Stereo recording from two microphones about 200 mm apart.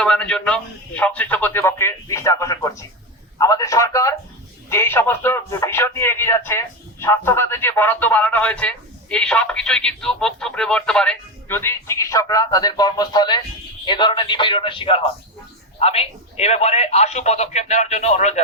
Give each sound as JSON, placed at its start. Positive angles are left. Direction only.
{"t": 0.0, "sound": "a man's voice", "side_deg": 5}